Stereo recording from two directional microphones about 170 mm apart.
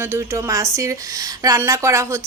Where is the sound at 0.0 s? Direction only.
15° right (ahead or behind).